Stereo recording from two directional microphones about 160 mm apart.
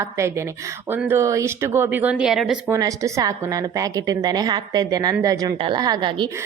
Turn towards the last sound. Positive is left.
turn(degrees=-30)  # may be behind; listen again after turning